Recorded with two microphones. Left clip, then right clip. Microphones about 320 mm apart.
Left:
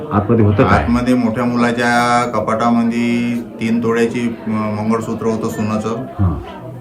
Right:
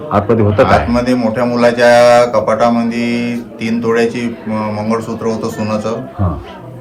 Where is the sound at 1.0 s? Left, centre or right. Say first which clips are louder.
Right 3 dB; centre.